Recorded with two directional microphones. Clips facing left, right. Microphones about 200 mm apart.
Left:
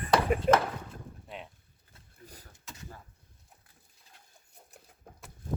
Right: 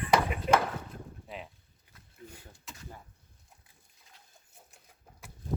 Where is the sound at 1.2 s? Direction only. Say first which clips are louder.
Right 1 dB; centre (ahead or behind).